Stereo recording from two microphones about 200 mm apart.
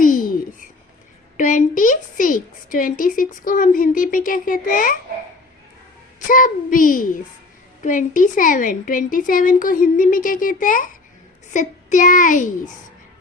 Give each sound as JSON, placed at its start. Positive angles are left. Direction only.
{"t": 0.0, "sound": "a sound", "side_deg": 45}
{"t": 1.4, "sound": "a woman's voice", "side_deg": 40}
{"t": 6.1, "sound": "a woman's voice", "side_deg": 40}